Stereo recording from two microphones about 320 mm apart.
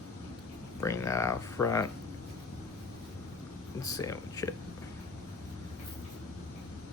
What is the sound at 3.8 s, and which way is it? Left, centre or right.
Speech, centre.